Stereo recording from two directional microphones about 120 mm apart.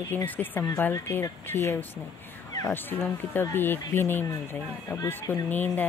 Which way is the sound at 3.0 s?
15° left (ahead or behind).